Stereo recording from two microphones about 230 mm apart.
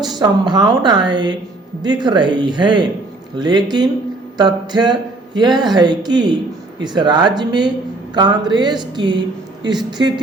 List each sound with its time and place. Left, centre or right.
0.2 s a woman's voice: centre